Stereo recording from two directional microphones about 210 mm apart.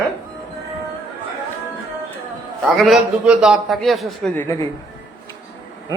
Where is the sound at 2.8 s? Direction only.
Centre (ahead or behind).